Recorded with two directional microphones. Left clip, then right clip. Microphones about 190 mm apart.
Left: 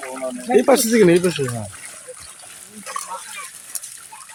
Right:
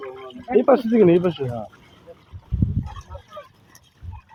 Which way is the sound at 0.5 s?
20° left (ahead or behind).